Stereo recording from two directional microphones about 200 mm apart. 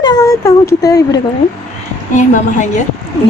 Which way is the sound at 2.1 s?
40° left (ahead or behind).